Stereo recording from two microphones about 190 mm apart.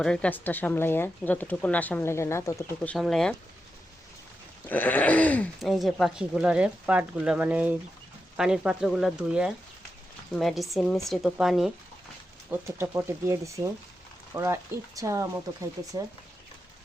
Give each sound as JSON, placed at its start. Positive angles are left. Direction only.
{"t": 0.0, "sound": "a woman's voice", "side_deg": 5}
{"t": 4.7, "sound": "speech", "side_deg": 10}
{"t": 12.5, "sound": "speech", "side_deg": -15}